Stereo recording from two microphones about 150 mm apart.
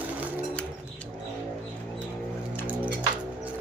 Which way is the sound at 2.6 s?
10° right (ahead or behind).